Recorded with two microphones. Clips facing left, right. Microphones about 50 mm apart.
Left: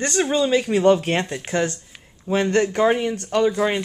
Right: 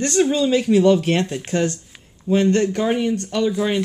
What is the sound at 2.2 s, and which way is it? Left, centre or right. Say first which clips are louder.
Speech: right 3 dB; left.